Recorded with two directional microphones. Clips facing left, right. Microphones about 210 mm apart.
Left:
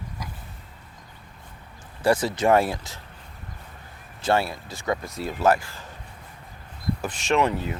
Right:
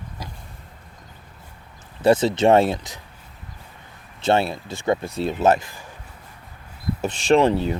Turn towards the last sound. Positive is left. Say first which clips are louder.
# right 6 dB
turn(degrees=-30)  # may be behind; listen again after turning